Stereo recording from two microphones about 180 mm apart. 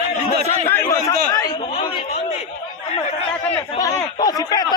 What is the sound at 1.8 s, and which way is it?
Speech, 30° left (ahead or behind).